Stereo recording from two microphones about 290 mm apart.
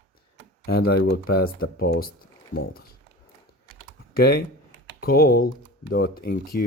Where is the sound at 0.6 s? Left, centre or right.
Left.